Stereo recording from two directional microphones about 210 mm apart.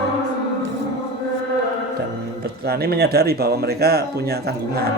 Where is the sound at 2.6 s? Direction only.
50° right (ahead or behind).